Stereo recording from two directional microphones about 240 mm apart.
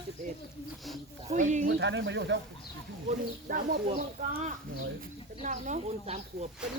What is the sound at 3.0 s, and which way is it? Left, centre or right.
Speech, right.